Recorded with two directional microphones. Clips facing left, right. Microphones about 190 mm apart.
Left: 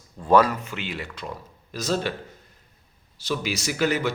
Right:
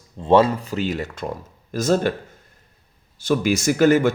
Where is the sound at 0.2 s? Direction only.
25° right (ahead or behind); by 2.1 s 50° right (ahead or behind).